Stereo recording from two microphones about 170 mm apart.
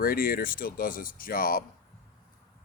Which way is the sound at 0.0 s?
60° left (ahead or behind).